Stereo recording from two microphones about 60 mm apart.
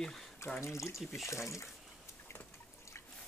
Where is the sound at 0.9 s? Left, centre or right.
Centre.